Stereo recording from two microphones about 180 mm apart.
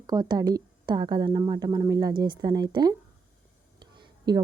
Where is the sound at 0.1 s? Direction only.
20° right (ahead or behind).